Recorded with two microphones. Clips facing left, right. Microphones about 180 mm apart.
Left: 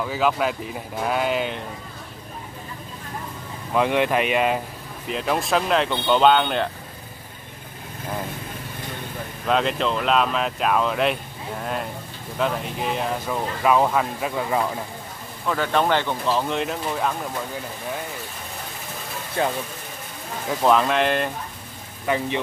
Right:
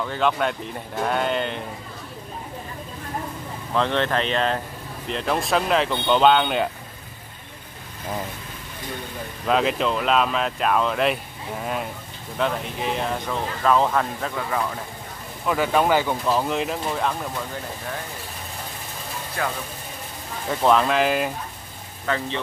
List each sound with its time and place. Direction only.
0.0 s speech: 5° left (ahead or behind)
3.7 s speech: 10° left (ahead or behind)
9.5 s speech: centre (ahead or behind)
14.3 s speech: 20° left (ahead or behind)
15.4 s speech: 5° right (ahead or behind)
19.4 s speech: 25° left (ahead or behind)
20.4 s speech: centre (ahead or behind)
22.0 s speech: 15° left (ahead or behind)